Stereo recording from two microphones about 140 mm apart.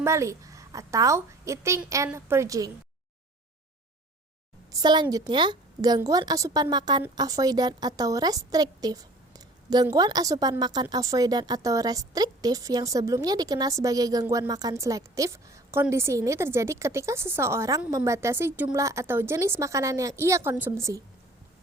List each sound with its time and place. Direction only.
0.0 s a woman's voice: 20° right (ahead or behind)
4.7 s a woman's voice: 30° right (ahead or behind)